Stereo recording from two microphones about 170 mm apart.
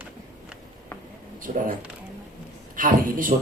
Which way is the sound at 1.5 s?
50° right (ahead or behind).